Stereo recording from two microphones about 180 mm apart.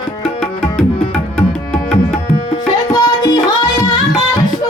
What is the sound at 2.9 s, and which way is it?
Music, 20° left (ahead or behind).